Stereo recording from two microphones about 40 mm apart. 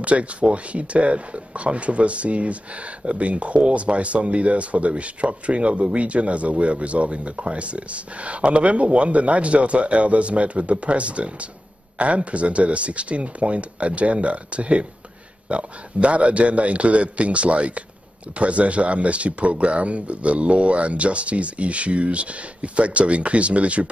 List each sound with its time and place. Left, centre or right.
0.0 s speech: right